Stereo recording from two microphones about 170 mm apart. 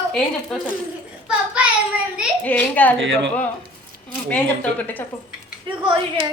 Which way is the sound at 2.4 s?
10° left (ahead or behind).